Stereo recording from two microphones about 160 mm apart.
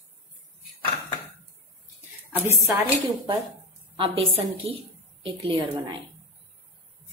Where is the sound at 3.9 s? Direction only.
35° right (ahead or behind).